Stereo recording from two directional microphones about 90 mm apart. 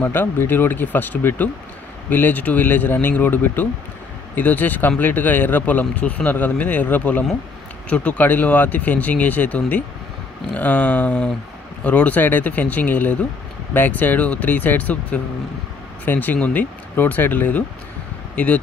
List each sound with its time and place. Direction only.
0.0 s speech: 25° left (ahead or behind)